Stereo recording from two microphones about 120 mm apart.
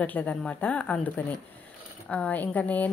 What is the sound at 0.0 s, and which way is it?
A woman's voice, 10° left (ahead or behind).